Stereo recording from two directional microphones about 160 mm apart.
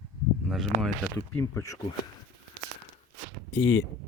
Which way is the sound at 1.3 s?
15° left (ahead or behind).